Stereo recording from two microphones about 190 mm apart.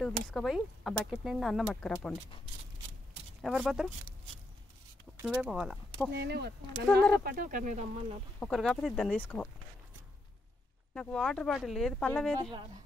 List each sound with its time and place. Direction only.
0.0 s speech: centre (ahead or behind)
3.4 s speech: centre (ahead or behind)
5.2 s speech: 5° right (ahead or behind)
6.1 s speech: 60° right (ahead or behind)
7.2 s speech: 45° right (ahead or behind)
8.4 s speech: centre (ahead or behind)
11.0 s speech: 5° left (ahead or behind)
12.4 s speech: 20° right (ahead or behind)